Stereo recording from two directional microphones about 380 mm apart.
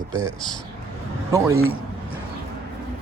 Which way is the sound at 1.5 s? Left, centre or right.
Right.